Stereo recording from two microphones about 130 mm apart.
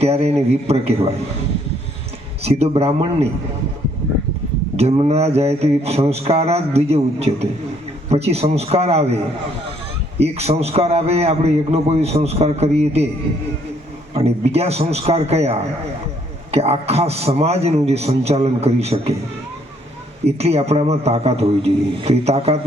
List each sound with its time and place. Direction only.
0.0 s a man's voice: 50° right (ahead or behind)
2.4 s a man's voice: 50° right (ahead or behind)
4.8 s a man's voice: 50° right (ahead or behind)
10.2 s a man's voice: 55° right (ahead or behind)
14.1 s a man's voice: 50° right (ahead or behind)
20.2 s a man's voice: 55° right (ahead or behind)